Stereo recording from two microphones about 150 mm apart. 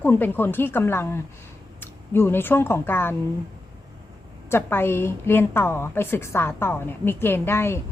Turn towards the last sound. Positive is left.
turn(degrees=15)  # may be behind; listen again after turning